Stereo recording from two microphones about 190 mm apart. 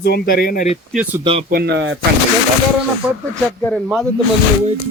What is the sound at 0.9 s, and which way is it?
Speech, 5° right (ahead or behind).